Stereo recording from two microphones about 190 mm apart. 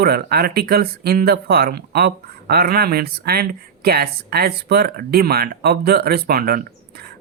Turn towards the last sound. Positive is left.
turn(degrees=-55)  # may be behind; listen again after turning